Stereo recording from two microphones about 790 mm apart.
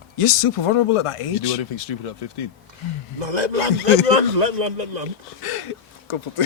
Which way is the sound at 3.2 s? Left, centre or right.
Right.